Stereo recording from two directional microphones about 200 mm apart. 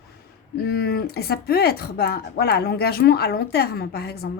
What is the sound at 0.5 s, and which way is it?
Speech, 55° left (ahead or behind).